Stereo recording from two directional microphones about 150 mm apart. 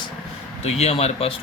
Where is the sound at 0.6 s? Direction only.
45° left (ahead or behind).